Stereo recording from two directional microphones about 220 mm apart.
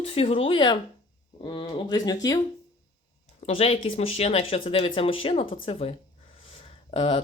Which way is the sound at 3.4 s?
25° left (ahead or behind).